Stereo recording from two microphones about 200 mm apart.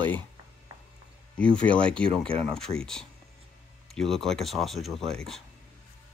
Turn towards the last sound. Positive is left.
turn(degrees=0)  # may be behind; listen again after turning